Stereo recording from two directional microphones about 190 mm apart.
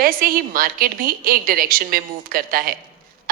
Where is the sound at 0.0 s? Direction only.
50° right (ahead or behind).